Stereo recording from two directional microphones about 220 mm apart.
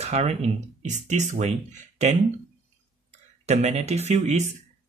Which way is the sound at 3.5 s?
30° right (ahead or behind).